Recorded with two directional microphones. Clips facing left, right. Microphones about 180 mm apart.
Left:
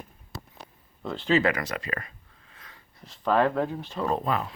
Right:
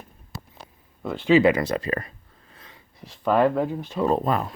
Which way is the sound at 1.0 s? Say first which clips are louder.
Right 6 dB; 5° right (ahead or behind).